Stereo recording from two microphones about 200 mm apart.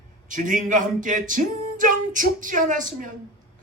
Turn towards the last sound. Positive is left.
turn(degrees=-40)  # may be behind; listen again after turning